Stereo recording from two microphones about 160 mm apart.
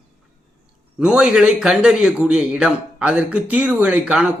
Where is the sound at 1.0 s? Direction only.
5° right (ahead or behind).